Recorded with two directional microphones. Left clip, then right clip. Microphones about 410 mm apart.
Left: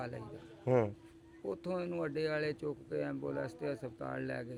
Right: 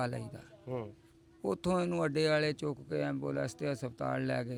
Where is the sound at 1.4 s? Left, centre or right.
Right.